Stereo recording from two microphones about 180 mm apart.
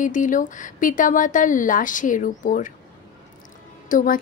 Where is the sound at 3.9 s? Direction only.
50° left (ahead or behind).